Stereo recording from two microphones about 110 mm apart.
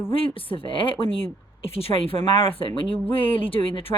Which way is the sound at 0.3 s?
55° left (ahead or behind).